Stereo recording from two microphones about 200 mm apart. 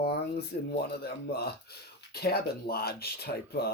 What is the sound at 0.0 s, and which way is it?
Speech, 55° left (ahead or behind).